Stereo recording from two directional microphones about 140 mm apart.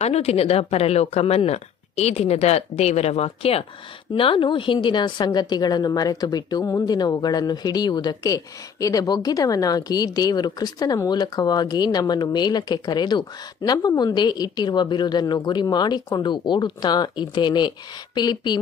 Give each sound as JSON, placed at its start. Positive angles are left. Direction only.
{"t": 0.0, "sound": "a woman's voice", "side_deg": 50}